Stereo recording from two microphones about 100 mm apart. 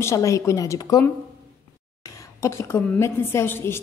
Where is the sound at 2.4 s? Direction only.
30° left (ahead or behind).